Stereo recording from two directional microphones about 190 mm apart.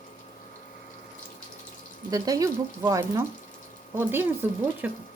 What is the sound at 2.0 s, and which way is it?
Speech, 20° right (ahead or behind).